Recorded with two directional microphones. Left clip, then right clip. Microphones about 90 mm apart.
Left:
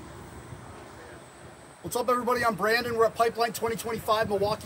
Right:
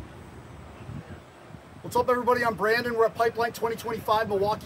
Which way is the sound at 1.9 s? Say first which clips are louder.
Right 3 dB; 10° right (ahead or behind).